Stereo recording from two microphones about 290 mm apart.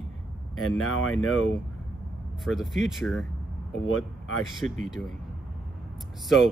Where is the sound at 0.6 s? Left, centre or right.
Left.